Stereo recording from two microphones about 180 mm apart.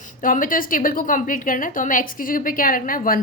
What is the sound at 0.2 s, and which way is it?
A woman's voice, 50° left (ahead or behind).